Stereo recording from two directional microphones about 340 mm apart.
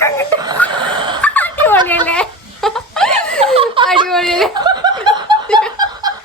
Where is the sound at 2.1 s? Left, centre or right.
Centre.